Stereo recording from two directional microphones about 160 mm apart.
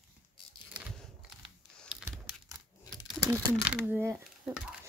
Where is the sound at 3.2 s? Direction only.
20° right (ahead or behind).